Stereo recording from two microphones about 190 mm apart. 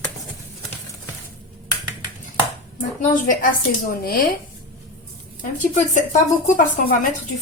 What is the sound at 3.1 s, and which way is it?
Speech, 45° left (ahead or behind).